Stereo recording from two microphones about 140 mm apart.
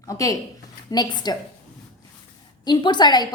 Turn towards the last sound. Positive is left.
turn(degrees=30)  # may be behind; listen again after turning